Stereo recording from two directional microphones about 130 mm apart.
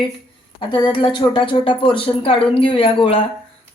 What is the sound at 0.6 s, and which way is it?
Speech, 40° left (ahead or behind).